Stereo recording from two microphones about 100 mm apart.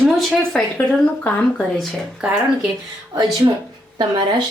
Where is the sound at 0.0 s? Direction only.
5° left (ahead or behind).